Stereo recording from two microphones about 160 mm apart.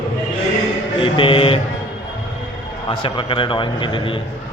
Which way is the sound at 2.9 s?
30° left (ahead or behind).